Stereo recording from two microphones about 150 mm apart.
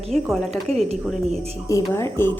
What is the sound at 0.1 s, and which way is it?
Speech, centre (ahead or behind).